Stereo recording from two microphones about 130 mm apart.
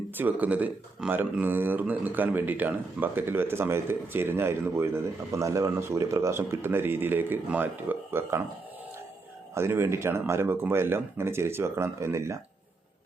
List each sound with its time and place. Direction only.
0.1 s speech: 15° right (ahead or behind)
9.6 s speech: 20° right (ahead or behind)